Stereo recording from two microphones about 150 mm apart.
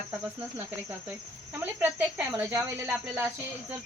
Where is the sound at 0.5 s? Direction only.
10° right (ahead or behind).